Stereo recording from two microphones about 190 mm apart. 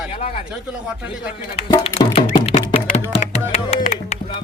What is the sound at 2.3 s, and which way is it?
Music, 35° left (ahead or behind).